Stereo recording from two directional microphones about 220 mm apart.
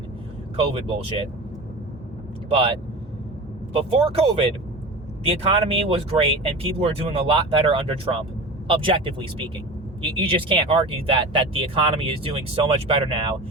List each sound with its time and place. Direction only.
0.5 s speech: 25° right (ahead or behind)
2.5 s speech: 25° right (ahead or behind)